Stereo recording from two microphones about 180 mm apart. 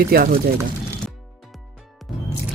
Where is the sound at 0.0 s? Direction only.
55° right (ahead or behind).